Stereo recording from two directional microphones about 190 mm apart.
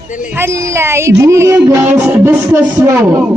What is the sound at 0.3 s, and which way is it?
Music, 15° right (ahead or behind).